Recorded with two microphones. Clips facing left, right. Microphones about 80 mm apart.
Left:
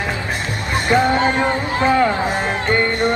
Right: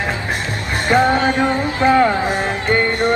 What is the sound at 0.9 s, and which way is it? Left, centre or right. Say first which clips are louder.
Music: right 2 dB; right.